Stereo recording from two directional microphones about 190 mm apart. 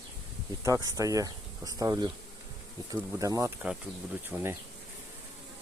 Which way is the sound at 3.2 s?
15° right (ahead or behind).